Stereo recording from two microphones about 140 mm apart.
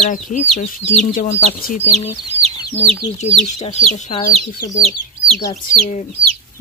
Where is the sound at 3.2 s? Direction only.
50° left (ahead or behind).